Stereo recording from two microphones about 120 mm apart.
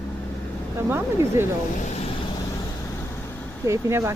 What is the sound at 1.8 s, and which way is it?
Vehicle, 65° left (ahead or behind).